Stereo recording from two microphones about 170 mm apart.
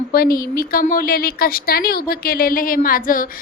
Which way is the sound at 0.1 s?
60° left (ahead or behind).